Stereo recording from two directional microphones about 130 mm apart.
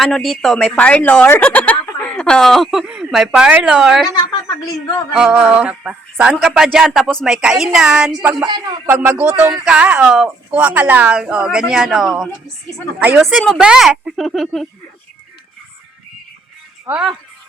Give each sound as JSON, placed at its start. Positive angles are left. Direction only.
{"t": 0.0, "sound": "speech", "side_deg": 0}
{"t": 4.1, "sound": "a sound", "side_deg": 35}
{"t": 5.1, "sound": "speech", "side_deg": -5}
{"t": 16.9, "sound": "speech", "side_deg": -15}